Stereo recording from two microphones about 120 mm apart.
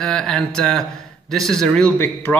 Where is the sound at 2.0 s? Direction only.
15° left (ahead or behind).